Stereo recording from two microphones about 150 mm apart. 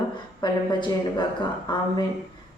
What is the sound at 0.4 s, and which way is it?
Speech, 30° left (ahead or behind).